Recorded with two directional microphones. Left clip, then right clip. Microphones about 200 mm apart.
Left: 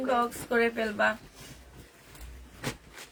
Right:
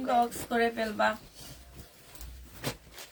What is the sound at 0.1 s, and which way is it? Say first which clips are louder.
Speech: right 1 dB; 20° left (ahead or behind).